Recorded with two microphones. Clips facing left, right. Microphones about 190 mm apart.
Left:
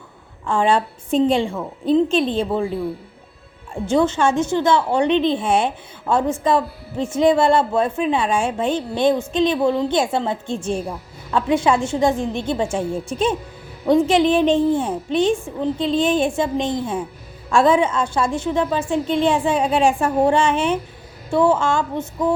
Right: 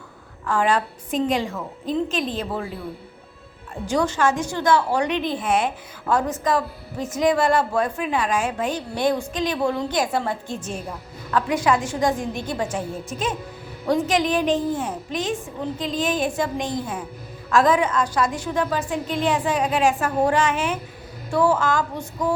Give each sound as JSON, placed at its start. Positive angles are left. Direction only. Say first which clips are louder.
{"t": 0.4, "sound": "a woman's voice", "louder": "left 3 dB", "side_deg": 25}
{"t": 3.8, "sound": "a woman's voice", "louder": "left 4 dB", "side_deg": 25}